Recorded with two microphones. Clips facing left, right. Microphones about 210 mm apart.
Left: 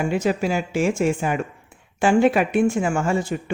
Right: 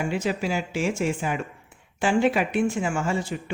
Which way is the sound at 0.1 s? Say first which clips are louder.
Left 5 dB; 50° left (ahead or behind).